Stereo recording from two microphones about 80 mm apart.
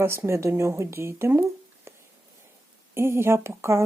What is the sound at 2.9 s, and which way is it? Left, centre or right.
Speech, right.